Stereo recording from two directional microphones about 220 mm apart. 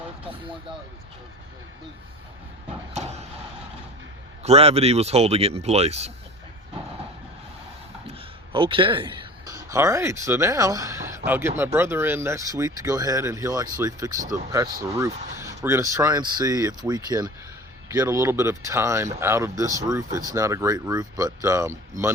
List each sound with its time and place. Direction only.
2.9 s a sound: 30° right (ahead or behind)
4.4 s speech: 25° right (ahead or behind)
8.5 s speech: 25° right (ahead or behind)